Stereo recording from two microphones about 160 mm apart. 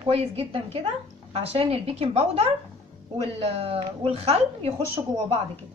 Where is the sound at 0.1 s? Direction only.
40° right (ahead or behind).